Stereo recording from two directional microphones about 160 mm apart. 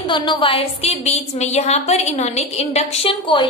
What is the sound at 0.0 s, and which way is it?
A woman's voice, 30° left (ahead or behind).